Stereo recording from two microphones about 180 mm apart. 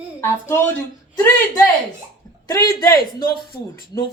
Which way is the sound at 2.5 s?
15° left (ahead or behind).